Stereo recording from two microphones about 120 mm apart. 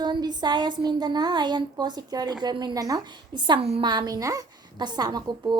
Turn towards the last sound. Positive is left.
turn(degrees=-35)  # may be behind; listen again after turning